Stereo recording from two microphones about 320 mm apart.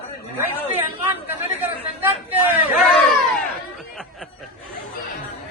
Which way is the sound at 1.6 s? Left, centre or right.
Centre.